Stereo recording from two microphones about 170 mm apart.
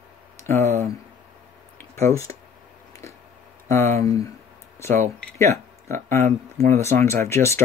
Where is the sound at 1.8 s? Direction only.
15° left (ahead or behind).